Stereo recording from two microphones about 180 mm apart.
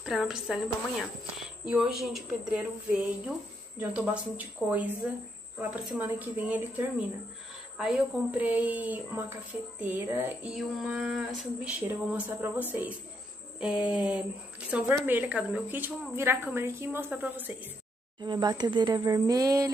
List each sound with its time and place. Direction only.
0.0 s a woman's voice: centre (ahead or behind)
1.7 s a woman's voice: 5° right (ahead or behind)
18.2 s speech: 25° right (ahead or behind)